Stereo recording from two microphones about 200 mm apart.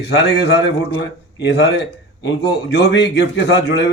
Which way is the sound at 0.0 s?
55° left (ahead or behind).